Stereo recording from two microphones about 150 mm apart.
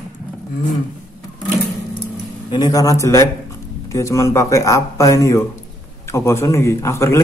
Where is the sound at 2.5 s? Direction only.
25° left (ahead or behind).